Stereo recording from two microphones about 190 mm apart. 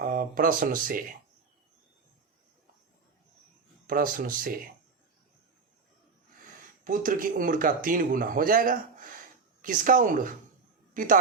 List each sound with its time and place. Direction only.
0.0 s speech: 45° right (ahead or behind)
3.8 s speech: 50° right (ahead or behind)
6.8 s a woman's voice: 45° right (ahead or behind)